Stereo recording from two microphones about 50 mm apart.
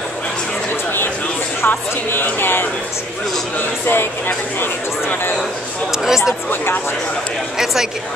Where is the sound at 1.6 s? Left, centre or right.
Left.